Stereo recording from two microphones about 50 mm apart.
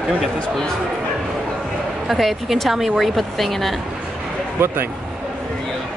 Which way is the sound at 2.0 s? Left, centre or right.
Centre.